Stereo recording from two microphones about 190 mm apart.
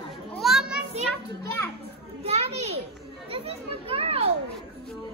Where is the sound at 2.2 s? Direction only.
35° right (ahead or behind).